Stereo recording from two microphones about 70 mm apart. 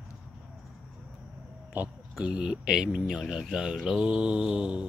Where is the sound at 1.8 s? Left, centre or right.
Right.